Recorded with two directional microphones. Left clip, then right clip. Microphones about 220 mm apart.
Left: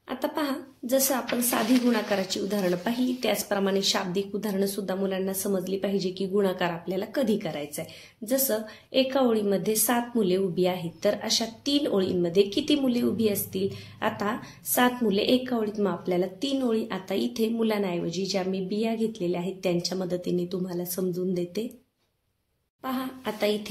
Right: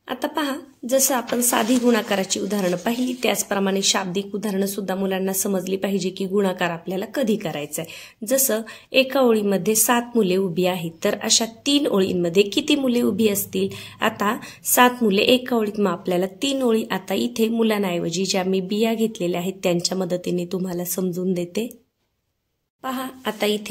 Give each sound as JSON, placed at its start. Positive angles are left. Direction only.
{"t": 0.1, "sound": "a woman's voice", "side_deg": -30}
{"t": 22.8, "sound": "a woman's voice", "side_deg": -30}